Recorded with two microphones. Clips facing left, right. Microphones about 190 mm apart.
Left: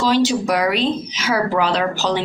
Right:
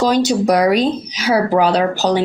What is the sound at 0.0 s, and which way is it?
Speech, 40° right (ahead or behind).